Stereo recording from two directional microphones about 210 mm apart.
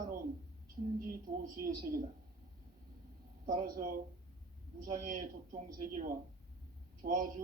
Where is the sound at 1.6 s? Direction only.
45° right (ahead or behind).